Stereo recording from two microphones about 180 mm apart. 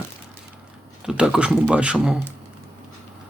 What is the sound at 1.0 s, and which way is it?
Speech, 5° right (ahead or behind).